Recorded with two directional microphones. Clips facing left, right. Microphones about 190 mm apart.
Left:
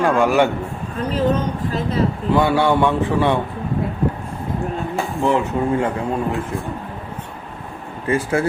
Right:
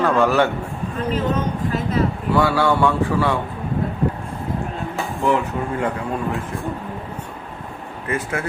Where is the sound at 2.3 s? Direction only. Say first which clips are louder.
Left 2 dB; 20° left (ahead or behind).